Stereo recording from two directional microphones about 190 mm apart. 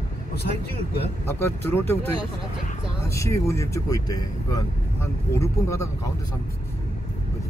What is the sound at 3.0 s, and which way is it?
Speech, 15° left (ahead or behind).